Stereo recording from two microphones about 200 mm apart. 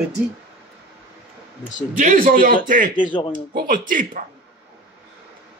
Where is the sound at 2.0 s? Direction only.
40° right (ahead or behind).